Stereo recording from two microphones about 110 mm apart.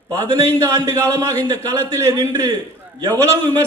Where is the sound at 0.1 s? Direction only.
30° right (ahead or behind).